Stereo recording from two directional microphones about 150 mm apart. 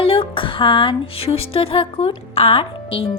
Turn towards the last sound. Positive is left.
turn(degrees=40)  # may be behind; listen again after turning